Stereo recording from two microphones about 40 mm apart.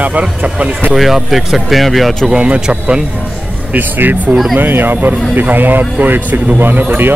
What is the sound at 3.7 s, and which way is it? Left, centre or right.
Speech, right.